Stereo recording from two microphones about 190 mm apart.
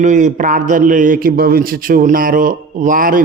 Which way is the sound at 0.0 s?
40° right (ahead or behind).